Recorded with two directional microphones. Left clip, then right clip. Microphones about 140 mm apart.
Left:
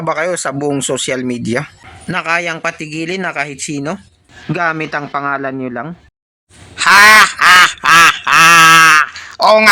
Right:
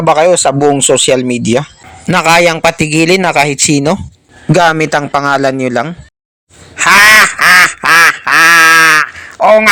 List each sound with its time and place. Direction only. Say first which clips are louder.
0.0 s speech: right 9 dB; 20° right (ahead or behind)
2.0 s a man's voice: right 9 dB; 50° right (ahead or behind)
6.7 s quack: right 1 dB; 25° right (ahead or behind)